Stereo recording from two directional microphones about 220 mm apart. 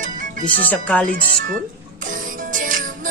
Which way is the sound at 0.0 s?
35° right (ahead or behind).